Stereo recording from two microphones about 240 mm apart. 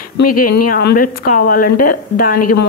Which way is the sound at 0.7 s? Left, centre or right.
Left.